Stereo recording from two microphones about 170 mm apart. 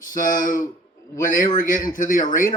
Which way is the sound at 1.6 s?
50° left (ahead or behind).